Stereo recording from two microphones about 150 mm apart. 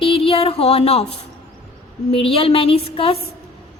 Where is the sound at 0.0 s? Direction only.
40° left (ahead or behind).